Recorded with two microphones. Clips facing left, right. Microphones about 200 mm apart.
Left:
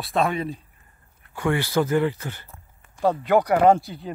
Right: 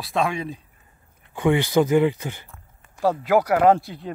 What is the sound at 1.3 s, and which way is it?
Speech, 20° right (ahead or behind).